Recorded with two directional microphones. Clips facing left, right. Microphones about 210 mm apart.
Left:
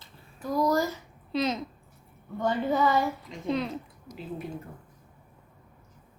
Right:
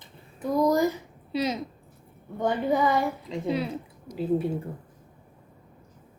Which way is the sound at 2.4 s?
15° right (ahead or behind).